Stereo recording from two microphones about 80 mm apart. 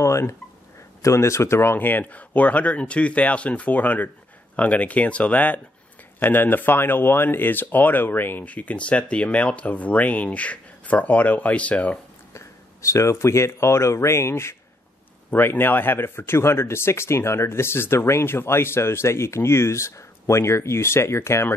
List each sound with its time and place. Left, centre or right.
0.0 s a sound: left
1.0 s speech: left; by 12.0 s centre
12.4 s speech: left